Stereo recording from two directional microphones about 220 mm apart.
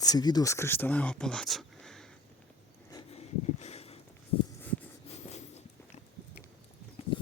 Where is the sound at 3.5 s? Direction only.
30° left (ahead or behind).